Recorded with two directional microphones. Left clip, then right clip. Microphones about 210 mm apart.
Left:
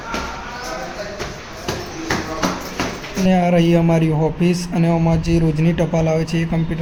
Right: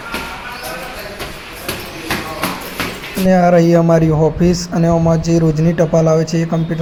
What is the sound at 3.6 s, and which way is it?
A man's voice, 15° right (ahead or behind).